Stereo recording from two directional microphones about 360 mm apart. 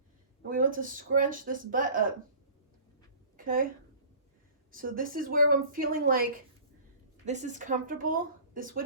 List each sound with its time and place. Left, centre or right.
0.4 s a woman's voice: right
3.3 s a woman's voice: right
4.7 s a woman's voice: right
7.3 s a woman's voice: centre